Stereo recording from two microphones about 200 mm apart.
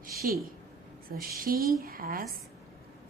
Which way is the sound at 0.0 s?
50° right (ahead or behind).